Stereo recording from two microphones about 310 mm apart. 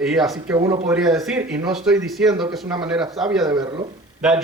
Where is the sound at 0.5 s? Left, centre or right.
Centre.